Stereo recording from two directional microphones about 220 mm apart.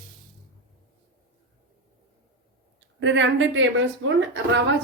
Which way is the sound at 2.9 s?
55° right (ahead or behind).